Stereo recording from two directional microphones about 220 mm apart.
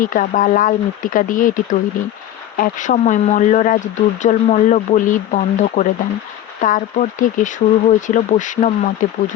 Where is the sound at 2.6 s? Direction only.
35° left (ahead or behind).